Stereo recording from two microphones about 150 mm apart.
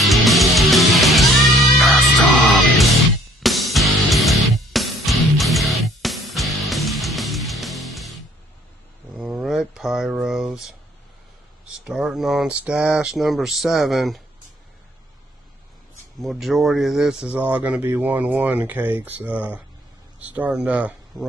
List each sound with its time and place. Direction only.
0.0 s music: centre (ahead or behind)
9.1 s a sound: 5° right (ahead or behind)
11.6 s speech: 5° right (ahead or behind)
16.2 s speech: centre (ahead or behind)